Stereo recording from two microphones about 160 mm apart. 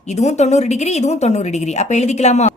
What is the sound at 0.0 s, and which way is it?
A woman's voice, 45° left (ahead or behind).